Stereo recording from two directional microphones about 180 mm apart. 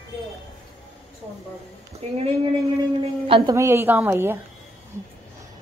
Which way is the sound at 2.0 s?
35° right (ahead or behind).